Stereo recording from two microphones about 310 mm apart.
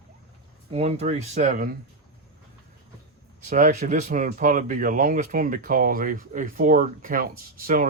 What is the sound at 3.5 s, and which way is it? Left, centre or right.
Speech, right.